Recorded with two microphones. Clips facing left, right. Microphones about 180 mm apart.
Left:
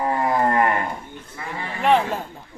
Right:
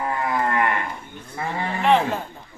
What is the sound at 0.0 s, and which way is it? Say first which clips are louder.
Moo: left 3 dB; 35° left (ahead or behind).